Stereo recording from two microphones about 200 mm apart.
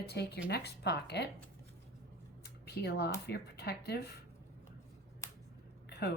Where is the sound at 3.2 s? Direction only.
55° left (ahead or behind).